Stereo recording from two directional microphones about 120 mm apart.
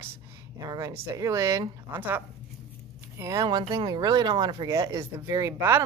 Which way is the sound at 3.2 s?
30° right (ahead or behind).